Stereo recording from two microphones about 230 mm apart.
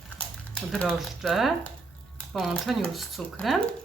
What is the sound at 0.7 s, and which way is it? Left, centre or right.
Speech, centre.